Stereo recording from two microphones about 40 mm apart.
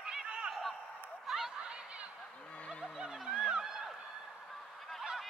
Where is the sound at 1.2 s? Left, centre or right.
Centre.